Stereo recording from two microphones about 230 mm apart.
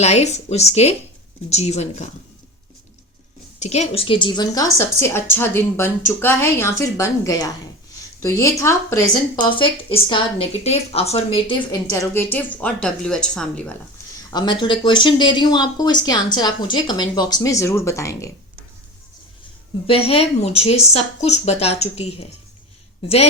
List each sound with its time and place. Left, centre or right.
0.0 s speech: left
3.6 s a woman's voice: left
11.9 s a woman's voice: centre
14.3 s speech: centre
19.9 s speech: left